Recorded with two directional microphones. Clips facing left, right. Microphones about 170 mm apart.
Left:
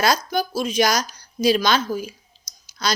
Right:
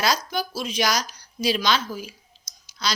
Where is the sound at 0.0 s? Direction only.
50° left (ahead or behind).